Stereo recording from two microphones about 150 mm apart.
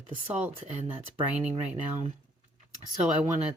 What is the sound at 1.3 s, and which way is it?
Speech, 10° right (ahead or behind).